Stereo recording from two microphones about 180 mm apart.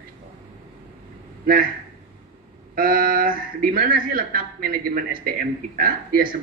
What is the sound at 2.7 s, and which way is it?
A woman's voice, 55° right (ahead or behind).